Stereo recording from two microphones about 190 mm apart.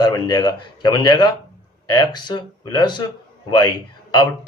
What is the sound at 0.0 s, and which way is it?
A man's voice, 20° left (ahead or behind).